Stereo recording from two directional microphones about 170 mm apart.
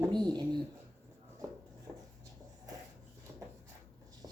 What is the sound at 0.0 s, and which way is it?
Speech, 25° right (ahead or behind).